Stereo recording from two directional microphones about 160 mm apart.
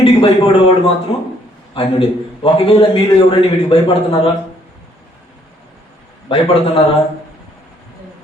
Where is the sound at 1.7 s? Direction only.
35° left (ahead or behind).